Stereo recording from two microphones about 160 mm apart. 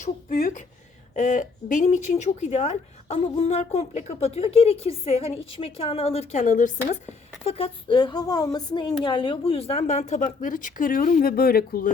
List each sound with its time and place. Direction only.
0.0 s speech: 55° left (ahead or behind)
7.4 s a woman's voice: 35° left (ahead or behind); by 11.9 s 70° left (ahead or behind)